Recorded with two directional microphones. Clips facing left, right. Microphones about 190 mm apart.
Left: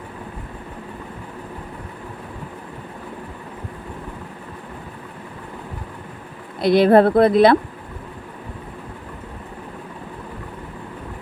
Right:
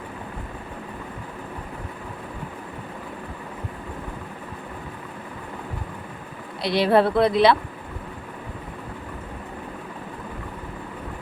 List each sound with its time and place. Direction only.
6.6 s speech: 50° left (ahead or behind)